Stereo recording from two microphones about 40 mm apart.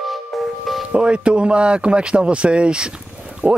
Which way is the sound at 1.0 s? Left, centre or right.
Right.